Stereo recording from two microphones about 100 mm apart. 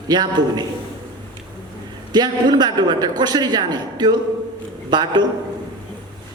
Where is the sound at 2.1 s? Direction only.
45° right (ahead or behind).